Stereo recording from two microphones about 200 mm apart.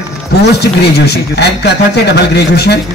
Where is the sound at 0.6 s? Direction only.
55° left (ahead or behind).